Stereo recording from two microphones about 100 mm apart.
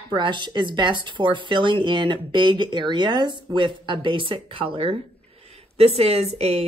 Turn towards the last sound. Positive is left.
turn(degrees=-90)